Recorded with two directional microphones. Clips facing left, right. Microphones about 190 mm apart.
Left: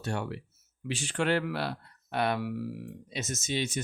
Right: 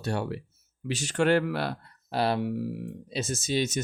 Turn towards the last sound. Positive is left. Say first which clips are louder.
# right 4 dB
turn(degrees=-40)  # may be behind; listen again after turning